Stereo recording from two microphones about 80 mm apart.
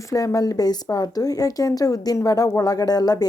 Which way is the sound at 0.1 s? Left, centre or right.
Left.